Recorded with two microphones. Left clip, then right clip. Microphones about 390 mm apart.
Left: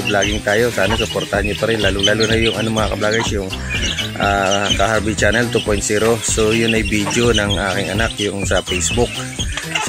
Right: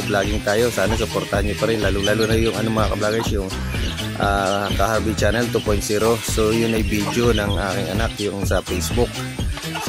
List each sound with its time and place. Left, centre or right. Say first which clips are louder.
0.1 s speech: left 4 dB; right